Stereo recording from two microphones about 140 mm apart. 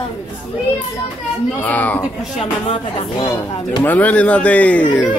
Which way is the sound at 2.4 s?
40° left (ahead or behind).